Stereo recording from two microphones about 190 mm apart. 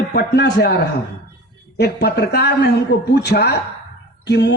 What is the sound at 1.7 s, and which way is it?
A woman's voice, 55° left (ahead or behind).